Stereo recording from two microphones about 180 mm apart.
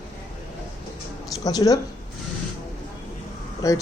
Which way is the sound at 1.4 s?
20° left (ahead or behind).